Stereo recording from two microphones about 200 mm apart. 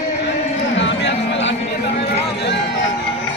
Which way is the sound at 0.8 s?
65° left (ahead or behind).